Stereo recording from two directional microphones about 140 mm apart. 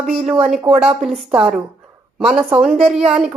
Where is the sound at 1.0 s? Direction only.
5° right (ahead or behind).